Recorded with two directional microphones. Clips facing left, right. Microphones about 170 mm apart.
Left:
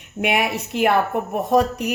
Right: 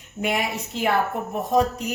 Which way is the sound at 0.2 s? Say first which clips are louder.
Left 4 dB; 70° left (ahead or behind).